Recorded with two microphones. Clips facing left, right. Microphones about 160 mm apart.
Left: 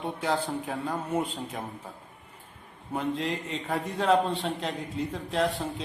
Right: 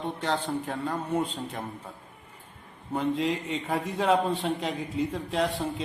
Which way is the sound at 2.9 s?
Centre (ahead or behind).